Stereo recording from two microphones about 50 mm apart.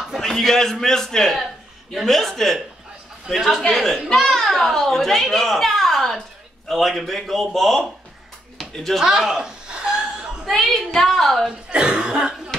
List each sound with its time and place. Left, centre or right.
0.2 s a man's voice: centre
8.5 s a sound: centre
9.0 s chuckle: centre
10.5 s a woman's voice: centre
11.7 s speech: centre